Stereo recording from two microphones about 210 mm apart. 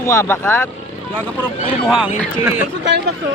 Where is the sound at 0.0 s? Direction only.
15° left (ahead or behind).